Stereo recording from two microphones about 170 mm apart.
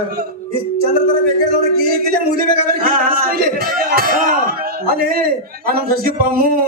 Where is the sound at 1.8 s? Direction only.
65° right (ahead or behind).